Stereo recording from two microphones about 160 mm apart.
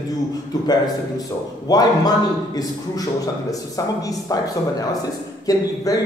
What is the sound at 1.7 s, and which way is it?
A man's voice, 25° left (ahead or behind).